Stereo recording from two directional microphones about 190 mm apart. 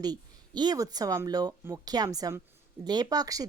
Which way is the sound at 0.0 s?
20° right (ahead or behind).